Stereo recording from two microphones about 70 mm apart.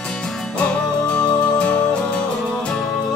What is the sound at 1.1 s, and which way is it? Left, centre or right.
Music, centre.